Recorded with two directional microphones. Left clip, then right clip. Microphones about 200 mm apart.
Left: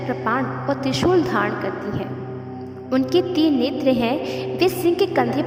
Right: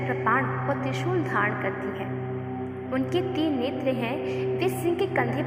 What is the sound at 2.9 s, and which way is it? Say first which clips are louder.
Speech: left 8 dB; 55° left (ahead or behind).